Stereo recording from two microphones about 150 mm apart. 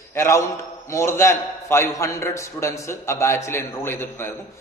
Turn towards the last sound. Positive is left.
turn(degrees=15)  # may be behind; listen again after turning